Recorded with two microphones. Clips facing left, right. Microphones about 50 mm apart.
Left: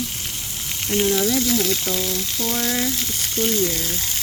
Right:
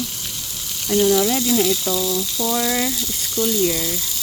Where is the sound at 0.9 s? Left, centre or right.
Left.